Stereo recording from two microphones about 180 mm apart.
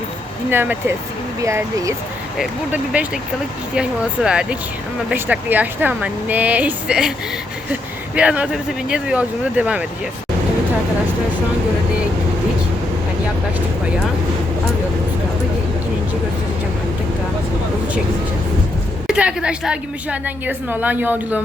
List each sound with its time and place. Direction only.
0.5 s a woman's voice: 10° right (ahead or behind)
19.0 s a woman's voice: 5° right (ahead or behind)